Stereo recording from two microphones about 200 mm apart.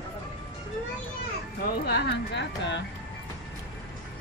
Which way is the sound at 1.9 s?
55° left (ahead or behind).